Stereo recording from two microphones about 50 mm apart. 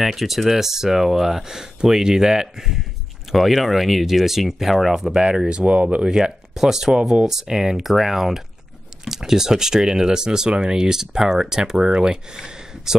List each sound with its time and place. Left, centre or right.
0.0 s speech: centre; by 6.0 s right
6.0 s speech: centre